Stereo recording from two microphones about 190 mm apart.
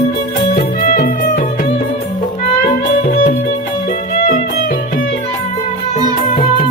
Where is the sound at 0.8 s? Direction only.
50° left (ahead or behind).